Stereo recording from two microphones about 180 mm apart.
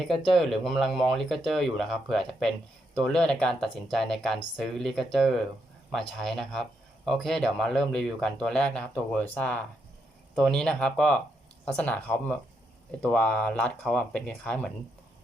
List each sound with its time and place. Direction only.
0.3 s speech: centre (ahead or behind)